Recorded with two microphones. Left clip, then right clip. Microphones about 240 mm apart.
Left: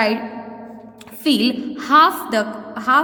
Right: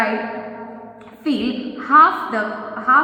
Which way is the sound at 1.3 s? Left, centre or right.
Left.